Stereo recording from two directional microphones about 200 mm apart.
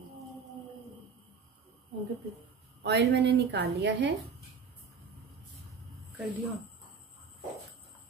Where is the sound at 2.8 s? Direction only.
60° right (ahead or behind).